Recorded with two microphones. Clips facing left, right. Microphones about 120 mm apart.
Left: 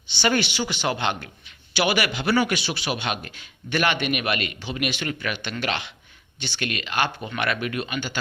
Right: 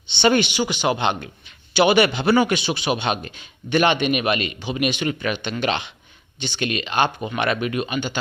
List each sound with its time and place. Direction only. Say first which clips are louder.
0.1 s a man's voice: right 5 dB; 25° right (ahead or behind)